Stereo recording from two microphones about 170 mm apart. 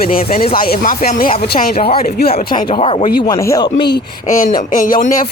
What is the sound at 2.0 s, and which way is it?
Speech, 65° left (ahead or behind).